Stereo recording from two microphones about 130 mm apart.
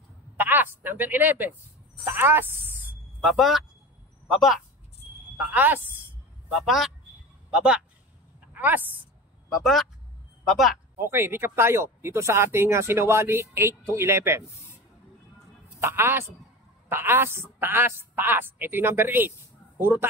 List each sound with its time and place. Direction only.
0.4 s a woman's voice: 15° right (ahead or behind)
3.2 s speech: 5° right (ahead or behind)
5.4 s a woman's voice: 15° right (ahead or behind)
6.5 s a woman's voice: centre (ahead or behind)
9.5 s speech: centre (ahead or behind)
11.0 s speech: 20° right (ahead or behind)
15.8 s a woman's voice: 20° right (ahead or behind)